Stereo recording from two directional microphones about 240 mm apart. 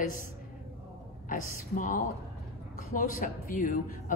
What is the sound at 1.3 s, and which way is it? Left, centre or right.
A man's voice, left.